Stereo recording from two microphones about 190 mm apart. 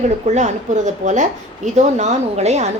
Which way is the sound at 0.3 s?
40° right (ahead or behind).